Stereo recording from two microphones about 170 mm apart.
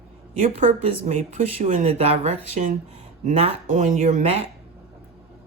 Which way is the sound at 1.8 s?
35° right (ahead or behind).